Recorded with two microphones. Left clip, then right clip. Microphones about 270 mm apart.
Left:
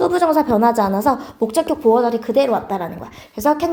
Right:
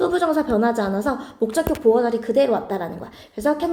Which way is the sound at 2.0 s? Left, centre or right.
Centre.